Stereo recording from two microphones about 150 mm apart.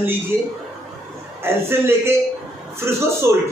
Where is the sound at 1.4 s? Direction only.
15° right (ahead or behind).